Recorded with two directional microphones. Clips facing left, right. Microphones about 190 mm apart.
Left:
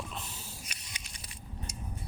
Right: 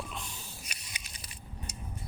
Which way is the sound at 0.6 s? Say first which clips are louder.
Even; 5° right (ahead or behind).